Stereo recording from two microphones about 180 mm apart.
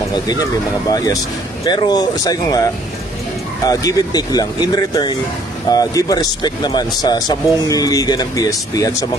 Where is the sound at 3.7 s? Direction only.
20° left (ahead or behind).